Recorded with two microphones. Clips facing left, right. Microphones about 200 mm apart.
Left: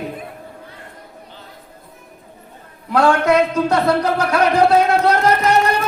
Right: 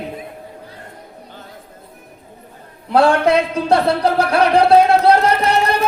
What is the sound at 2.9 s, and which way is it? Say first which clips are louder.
A man's voice: right 1 dB; 30° right (ahead or behind).